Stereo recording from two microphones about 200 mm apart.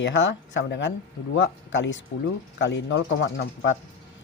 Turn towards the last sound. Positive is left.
turn(degrees=65)  # may be behind; listen again after turning